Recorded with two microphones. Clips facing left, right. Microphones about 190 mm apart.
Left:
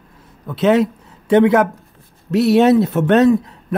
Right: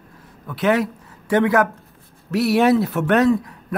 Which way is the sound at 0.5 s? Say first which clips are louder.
Left 5 dB; 20° left (ahead or behind).